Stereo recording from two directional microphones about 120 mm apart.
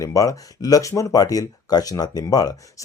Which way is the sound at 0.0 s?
30° left (ahead or behind).